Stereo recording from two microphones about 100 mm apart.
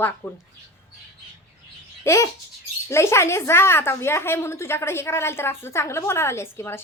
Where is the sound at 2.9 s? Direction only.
30° left (ahead or behind).